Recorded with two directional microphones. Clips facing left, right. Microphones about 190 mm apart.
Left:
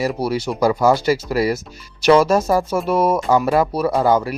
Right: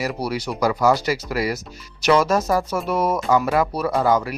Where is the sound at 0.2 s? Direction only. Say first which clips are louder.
Left 4 dB; 25° left (ahead or behind).